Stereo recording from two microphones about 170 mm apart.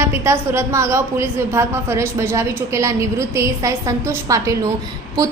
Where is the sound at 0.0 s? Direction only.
15° right (ahead or behind).